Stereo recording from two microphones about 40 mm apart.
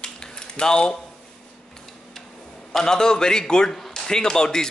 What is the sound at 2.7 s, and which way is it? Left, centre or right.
Speech, centre.